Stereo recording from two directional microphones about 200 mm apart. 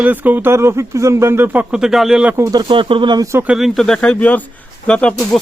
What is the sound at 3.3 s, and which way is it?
Speech, 5° right (ahead or behind).